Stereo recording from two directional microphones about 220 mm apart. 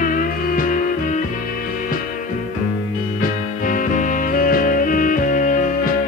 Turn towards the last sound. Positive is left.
turn(degrees=35)  # may be behind; listen again after turning